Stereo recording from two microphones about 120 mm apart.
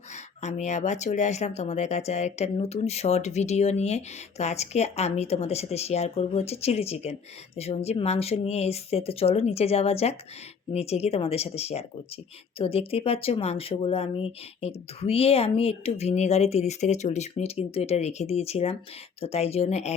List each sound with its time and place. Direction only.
0.4 s speech: 75° left (ahead or behind)